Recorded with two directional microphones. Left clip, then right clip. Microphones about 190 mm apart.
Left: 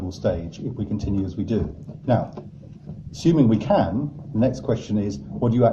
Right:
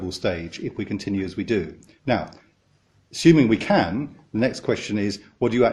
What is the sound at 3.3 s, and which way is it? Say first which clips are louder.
Speech: right 2 dB; 50° right (ahead or behind).